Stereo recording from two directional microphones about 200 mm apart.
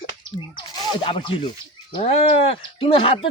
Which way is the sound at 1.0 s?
25° left (ahead or behind).